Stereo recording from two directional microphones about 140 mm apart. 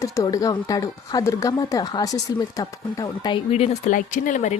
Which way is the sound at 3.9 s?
70° left (ahead or behind).